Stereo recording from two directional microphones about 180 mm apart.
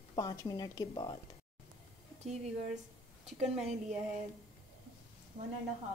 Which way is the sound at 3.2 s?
35° right (ahead or behind).